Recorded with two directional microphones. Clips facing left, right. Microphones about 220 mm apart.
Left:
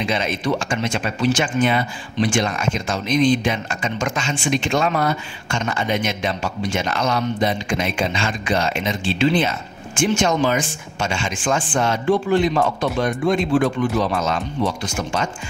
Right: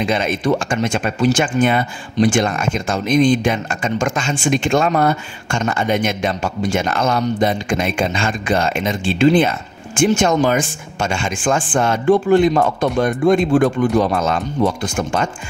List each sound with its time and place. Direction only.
0.0 s speech: 50° right (ahead or behind)